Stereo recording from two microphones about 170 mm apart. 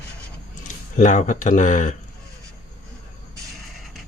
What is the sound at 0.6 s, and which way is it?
Speech, 45° left (ahead or behind).